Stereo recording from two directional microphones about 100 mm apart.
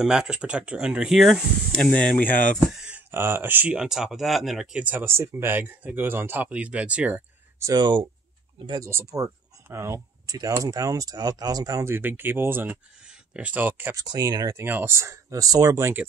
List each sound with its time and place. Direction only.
0.0 s speech: 5° right (ahead or behind)
1.7 s speech: 10° left (ahead or behind)
3.1 s speech: 20° right (ahead or behind)
3.7 s speech: 5° right (ahead or behind)
4.7 s speech: 15° right (ahead or behind)
7.7 s speech: 50° right (ahead or behind)
8.6 s speech: 35° right (ahead or behind)
11.9 s speech: 20° right (ahead or behind)
13.9 s speech: 35° right (ahead or behind)
14.6 s speech: 25° right (ahead or behind)